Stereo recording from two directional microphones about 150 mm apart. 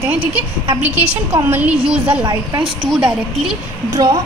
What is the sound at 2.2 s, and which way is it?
Speech, 30° right (ahead or behind).